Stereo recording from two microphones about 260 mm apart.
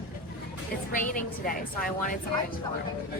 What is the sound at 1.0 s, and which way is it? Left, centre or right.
A woman's voice, left.